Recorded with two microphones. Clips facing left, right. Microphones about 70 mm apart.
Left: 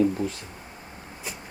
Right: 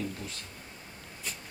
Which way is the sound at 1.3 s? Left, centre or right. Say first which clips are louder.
Left 4 dB; centre.